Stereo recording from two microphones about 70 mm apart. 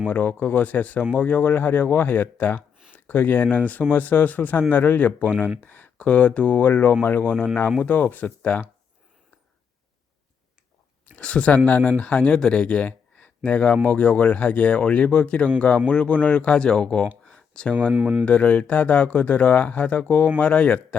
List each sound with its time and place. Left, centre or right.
0.1 s speech: left
7.3 s speech: centre
7.8 s speech: left
11.2 s speech: centre
17.2 s a sound: centre
17.9 s speech: right
18.3 s speech: centre